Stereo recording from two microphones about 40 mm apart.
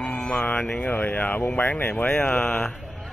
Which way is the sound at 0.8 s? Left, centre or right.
Left.